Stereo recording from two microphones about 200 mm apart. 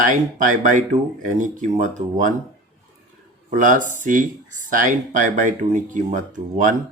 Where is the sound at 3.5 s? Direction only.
40° right (ahead or behind).